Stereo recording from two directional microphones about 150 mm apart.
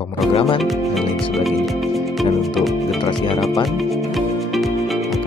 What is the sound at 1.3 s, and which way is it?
Speech, centre (ahead or behind).